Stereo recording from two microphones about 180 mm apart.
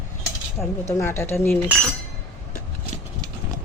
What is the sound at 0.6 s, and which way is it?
Speech, 15° left (ahead or behind).